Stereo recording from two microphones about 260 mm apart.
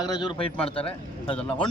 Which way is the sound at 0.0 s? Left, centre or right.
Centre.